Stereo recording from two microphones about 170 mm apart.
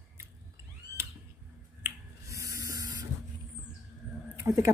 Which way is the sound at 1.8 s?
20° right (ahead or behind).